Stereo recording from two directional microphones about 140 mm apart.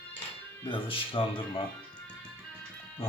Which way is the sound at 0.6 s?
35° left (ahead or behind).